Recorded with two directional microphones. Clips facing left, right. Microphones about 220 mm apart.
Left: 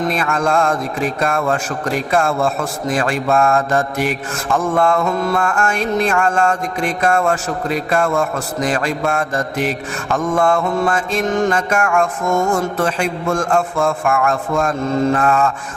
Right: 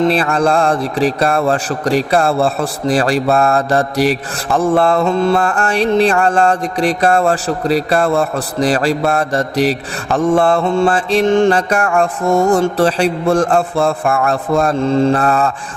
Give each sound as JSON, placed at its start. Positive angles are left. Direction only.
{"t": 0.0, "sound": "a man's voice", "side_deg": -35}